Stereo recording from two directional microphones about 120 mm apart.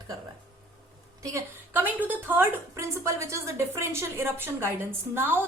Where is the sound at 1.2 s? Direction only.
20° right (ahead or behind).